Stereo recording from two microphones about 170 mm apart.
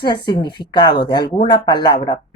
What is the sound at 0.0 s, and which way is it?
Speech, 25° left (ahead or behind).